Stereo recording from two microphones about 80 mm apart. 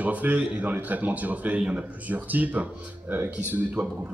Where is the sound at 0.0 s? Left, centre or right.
Centre.